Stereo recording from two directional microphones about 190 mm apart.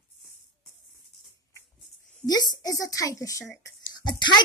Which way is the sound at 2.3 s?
20° left (ahead or behind).